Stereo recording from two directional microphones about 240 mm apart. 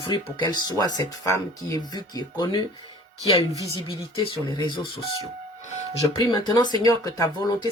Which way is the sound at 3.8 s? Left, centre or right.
Left.